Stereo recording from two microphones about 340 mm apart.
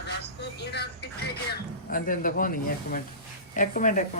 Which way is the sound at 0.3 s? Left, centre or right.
Left.